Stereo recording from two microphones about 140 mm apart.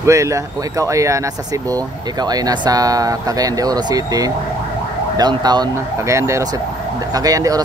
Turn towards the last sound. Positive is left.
turn(degrees=-25)  # may be behind; listen again after turning